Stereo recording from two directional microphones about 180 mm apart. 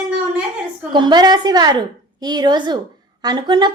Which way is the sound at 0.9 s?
25° right (ahead or behind).